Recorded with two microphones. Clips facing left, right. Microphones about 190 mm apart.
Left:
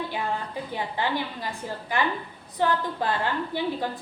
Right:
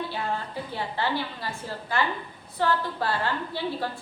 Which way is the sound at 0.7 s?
15° left (ahead or behind).